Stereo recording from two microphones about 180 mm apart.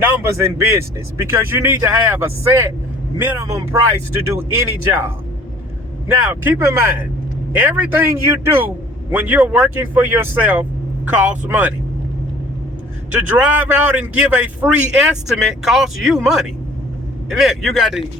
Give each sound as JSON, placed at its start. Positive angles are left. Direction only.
{"t": 0.0, "sound": "a man's voice", "side_deg": -15}
{"t": 6.3, "sound": "a man's voice", "side_deg": -15}
{"t": 13.1, "sound": "a man's voice", "side_deg": -10}